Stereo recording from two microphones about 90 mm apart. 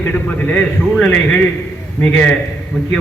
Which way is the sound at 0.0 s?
20° left (ahead or behind).